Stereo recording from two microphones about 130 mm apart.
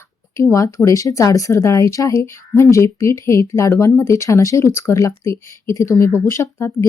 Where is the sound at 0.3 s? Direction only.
25° left (ahead or behind).